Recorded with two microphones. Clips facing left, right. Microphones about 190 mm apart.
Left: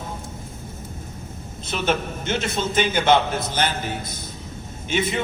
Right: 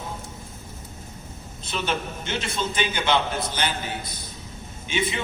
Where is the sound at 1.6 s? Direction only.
50° left (ahead or behind).